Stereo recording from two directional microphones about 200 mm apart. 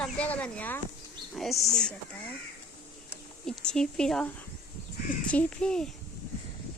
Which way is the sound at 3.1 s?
5° left (ahead or behind).